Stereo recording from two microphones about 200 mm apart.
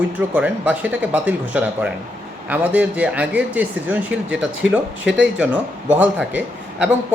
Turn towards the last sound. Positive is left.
turn(degrees=-5)  # may be behind; listen again after turning